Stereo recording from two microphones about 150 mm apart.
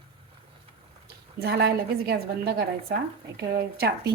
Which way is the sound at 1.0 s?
90° right.